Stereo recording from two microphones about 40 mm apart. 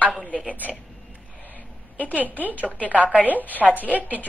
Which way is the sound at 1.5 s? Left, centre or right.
Left.